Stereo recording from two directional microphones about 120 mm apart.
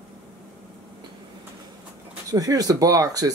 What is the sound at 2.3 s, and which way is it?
Speech, 30° right (ahead or behind).